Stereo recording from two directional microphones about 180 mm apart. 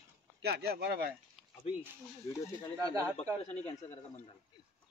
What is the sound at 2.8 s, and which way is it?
Speech, 20° right (ahead or behind).